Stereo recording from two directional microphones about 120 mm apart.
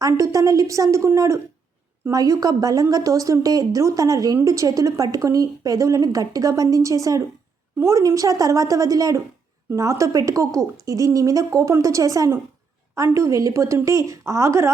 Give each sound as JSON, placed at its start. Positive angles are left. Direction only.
{"t": 0.0, "sound": "speech", "side_deg": -30}